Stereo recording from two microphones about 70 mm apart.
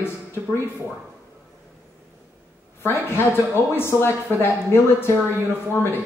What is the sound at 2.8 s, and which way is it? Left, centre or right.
Speech, left.